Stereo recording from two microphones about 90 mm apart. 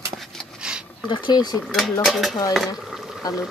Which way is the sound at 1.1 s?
60° left (ahead or behind).